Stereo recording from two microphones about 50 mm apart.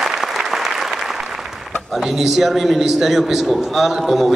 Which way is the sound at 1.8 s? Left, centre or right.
Centre.